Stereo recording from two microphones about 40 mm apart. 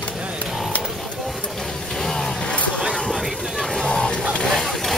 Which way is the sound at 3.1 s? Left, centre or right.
Centre.